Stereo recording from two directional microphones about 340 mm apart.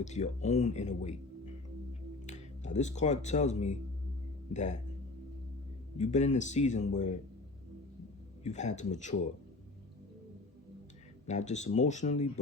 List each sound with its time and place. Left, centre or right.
0.0 s speech: centre
1.9 s music: left
4.5 s speech: left
6.0 s speech: centre
8.4 s speech: centre
11.3 s speech: centre